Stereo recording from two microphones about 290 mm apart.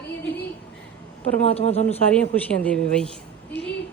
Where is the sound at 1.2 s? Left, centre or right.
Left.